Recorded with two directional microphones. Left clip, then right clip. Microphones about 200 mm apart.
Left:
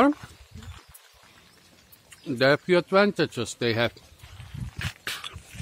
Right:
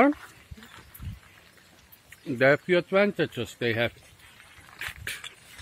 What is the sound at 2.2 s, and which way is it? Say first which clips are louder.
Speech: even; 10° left (ahead or behind).